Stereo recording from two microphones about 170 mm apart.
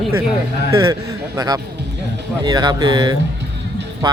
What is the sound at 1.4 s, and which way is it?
A man's voice, 20° right (ahead or behind).